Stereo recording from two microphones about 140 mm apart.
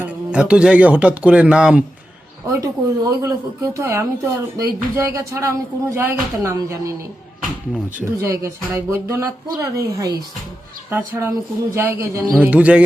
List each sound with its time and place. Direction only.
0.0 s speech: 10° right (ahead or behind)
2.5 s speech: 25° right (ahead or behind)
8.3 s speech: 20° right (ahead or behind)
10.8 s speech: 15° right (ahead or behind)